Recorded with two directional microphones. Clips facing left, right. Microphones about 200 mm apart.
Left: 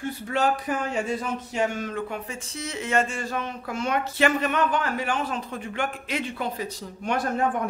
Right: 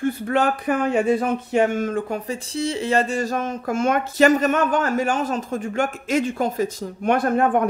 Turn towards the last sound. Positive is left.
turn(degrees=-60)  # may be behind; listen again after turning